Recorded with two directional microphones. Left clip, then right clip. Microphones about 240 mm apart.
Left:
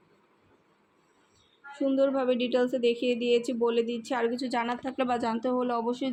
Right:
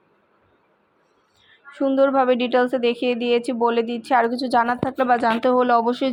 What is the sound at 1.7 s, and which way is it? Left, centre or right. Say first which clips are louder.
A woman's voice: right 8 dB; right.